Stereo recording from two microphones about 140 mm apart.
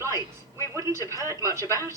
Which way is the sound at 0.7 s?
20° right (ahead or behind).